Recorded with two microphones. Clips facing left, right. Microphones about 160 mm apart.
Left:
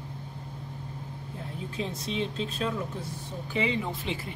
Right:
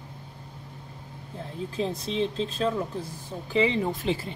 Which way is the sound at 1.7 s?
35° right (ahead or behind).